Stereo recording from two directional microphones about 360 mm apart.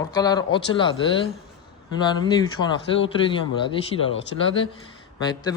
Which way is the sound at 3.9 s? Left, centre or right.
Left.